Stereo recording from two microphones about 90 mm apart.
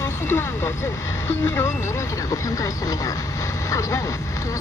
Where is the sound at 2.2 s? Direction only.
40° left (ahead or behind).